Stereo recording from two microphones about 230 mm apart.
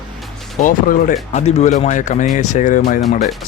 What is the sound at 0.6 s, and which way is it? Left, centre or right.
Speech, left.